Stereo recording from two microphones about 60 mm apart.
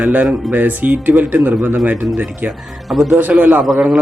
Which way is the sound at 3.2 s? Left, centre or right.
Right.